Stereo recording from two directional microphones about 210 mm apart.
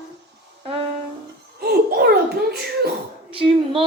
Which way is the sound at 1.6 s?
50° right (ahead or behind).